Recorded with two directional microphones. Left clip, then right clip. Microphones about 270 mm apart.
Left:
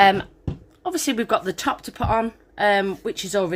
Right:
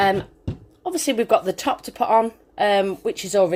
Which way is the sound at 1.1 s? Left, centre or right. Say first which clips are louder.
Right 6 dB; centre.